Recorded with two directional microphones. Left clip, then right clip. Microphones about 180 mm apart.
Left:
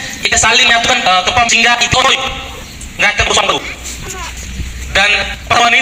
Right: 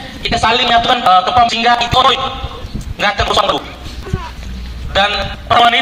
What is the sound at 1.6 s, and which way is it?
Speech, 25° left (ahead or behind).